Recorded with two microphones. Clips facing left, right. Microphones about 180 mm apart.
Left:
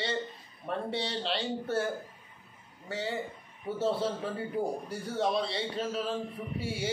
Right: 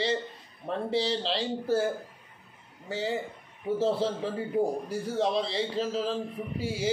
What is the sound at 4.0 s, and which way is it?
Speech, 25° right (ahead or behind).